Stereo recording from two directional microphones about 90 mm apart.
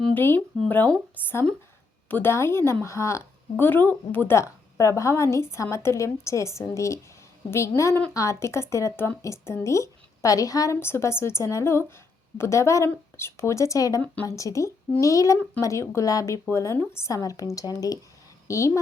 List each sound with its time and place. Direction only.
0.1 s a woman's voice: 20° left (ahead or behind)
4.8 s speech: 35° left (ahead or behind)
8.1 s speech: 35° left (ahead or behind)
10.8 s speech: 25° left (ahead or behind)